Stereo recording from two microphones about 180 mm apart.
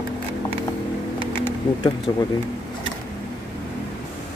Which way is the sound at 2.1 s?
25° left (ahead or behind).